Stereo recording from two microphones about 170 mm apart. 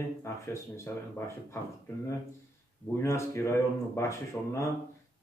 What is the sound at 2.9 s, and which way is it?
Speech, 15° left (ahead or behind).